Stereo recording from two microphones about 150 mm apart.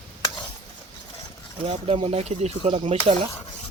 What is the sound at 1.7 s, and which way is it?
Speech, 35° right (ahead or behind).